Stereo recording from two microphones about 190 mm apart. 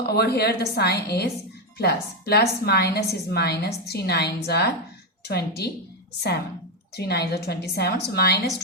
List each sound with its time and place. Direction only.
0.0 s a woman's voice: 55° left (ahead or behind)
6.9 s a woman's voice: 60° left (ahead or behind)